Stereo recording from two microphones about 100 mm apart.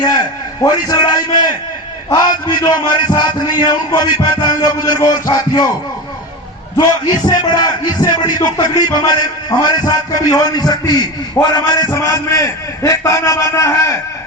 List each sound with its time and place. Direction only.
0.6 s a man's voice: 40° left (ahead or behind)
2.5 s a man's voice: 45° left (ahead or behind)
6.7 s a man's voice: 40° left (ahead or behind)